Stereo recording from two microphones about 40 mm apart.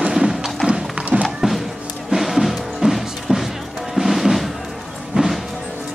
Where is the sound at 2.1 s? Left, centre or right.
Centre.